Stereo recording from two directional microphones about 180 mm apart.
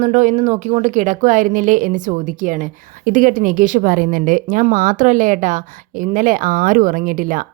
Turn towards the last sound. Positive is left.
turn(degrees=-50)  # may be behind; listen again after turning